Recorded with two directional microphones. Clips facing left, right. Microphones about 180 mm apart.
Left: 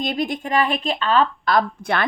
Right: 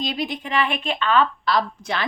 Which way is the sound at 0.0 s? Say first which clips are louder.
Left 3 dB; 50° left (ahead or behind).